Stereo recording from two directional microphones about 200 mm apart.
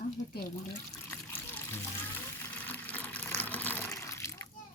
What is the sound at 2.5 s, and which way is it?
Water, 10° left (ahead or behind).